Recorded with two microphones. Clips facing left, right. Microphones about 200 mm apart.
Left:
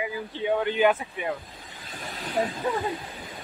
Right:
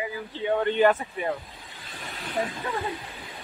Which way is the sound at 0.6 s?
Centre (ahead or behind).